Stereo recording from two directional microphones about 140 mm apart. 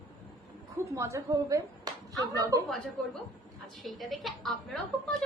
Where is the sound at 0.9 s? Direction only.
20° right (ahead or behind).